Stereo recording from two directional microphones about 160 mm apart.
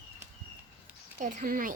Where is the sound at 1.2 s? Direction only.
55° right (ahead or behind).